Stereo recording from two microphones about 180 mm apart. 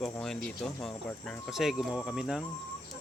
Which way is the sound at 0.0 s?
5° left (ahead or behind).